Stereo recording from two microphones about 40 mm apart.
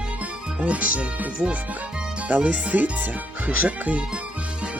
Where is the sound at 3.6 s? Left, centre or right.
Right.